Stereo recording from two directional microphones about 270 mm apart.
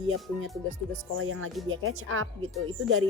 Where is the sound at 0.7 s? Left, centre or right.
Right.